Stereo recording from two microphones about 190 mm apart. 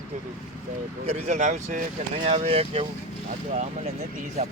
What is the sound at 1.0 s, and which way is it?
Speech, 40° right (ahead or behind).